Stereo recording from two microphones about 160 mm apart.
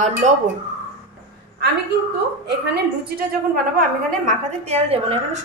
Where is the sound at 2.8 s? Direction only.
75° right (ahead or behind).